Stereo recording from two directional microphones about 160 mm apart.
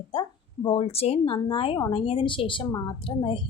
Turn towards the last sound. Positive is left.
turn(degrees=30)  # may be behind; listen again after turning